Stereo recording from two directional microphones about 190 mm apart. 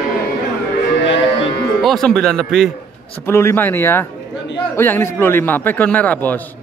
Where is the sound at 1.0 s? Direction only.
70° left (ahead or behind).